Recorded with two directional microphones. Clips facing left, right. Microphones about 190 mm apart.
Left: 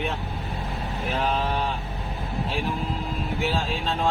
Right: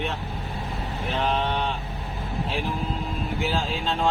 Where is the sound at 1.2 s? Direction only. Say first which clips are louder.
Right 1 dB; 5° left (ahead or behind).